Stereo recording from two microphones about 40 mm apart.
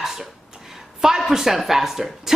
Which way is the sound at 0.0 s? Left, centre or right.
Centre.